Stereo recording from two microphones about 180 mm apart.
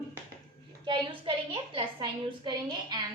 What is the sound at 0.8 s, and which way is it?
A woman's voice, 25° right (ahead or behind).